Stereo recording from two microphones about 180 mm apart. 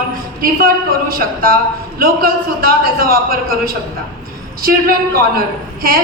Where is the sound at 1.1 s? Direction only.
50° right (ahead or behind).